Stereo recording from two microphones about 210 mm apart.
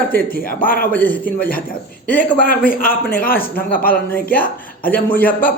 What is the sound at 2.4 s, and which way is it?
Speech, 40° left (ahead or behind).